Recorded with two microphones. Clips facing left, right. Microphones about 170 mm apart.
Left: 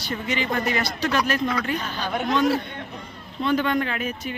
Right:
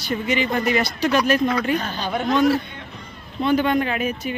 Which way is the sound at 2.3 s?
5° right (ahead or behind).